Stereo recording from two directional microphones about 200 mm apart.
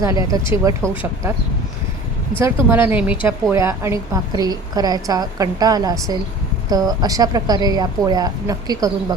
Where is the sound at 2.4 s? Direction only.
15° right (ahead or behind).